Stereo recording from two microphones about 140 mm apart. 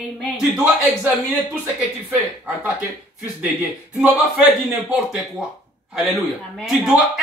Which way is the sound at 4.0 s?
5° right (ahead or behind).